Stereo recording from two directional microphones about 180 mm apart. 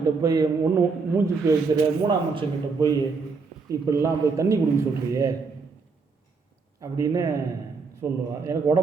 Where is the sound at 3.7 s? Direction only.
15° right (ahead or behind).